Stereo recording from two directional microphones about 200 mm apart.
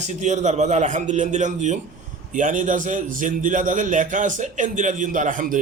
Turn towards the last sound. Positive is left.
turn(degrees=-40)  # may be behind; listen again after turning